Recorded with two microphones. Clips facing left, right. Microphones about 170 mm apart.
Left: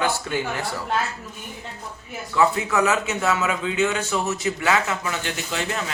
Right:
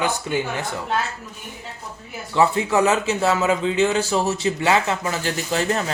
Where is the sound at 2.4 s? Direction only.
30° right (ahead or behind).